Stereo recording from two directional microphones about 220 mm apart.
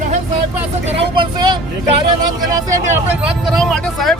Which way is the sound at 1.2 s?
20° right (ahead or behind).